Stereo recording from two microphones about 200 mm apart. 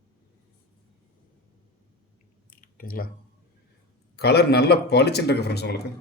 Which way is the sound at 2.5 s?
45° left (ahead or behind).